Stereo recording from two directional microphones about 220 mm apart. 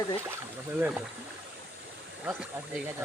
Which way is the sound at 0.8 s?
10° right (ahead or behind).